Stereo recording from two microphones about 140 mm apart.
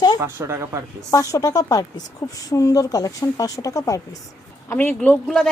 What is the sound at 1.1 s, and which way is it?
A woman's voice, 25° left (ahead or behind).